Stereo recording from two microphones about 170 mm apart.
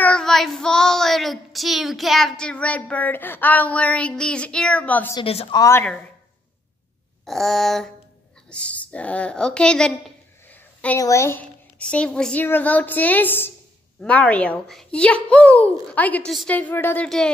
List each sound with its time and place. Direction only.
0.0 s child singing: 5° left (ahead or behind)
5.1 s a woman's voice: 35° left (ahead or behind)
5.6 s a child's voice: 15° left (ahead or behind)
7.2 s child singing: centre (ahead or behind)
8.5 s a woman's voice: 5° left (ahead or behind)